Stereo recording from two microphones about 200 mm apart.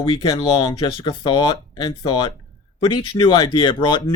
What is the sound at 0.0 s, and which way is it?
Speech, 15° left (ahead or behind).